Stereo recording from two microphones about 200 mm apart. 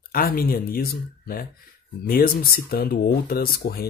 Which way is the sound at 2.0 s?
45° left (ahead or behind).